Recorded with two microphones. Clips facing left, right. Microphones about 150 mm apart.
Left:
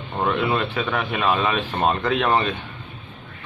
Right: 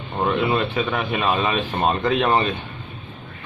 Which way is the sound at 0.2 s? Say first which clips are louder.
Right 1 dB; 15° right (ahead or behind).